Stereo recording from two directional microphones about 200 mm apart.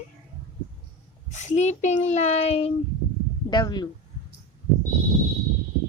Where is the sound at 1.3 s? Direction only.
35° left (ahead or behind).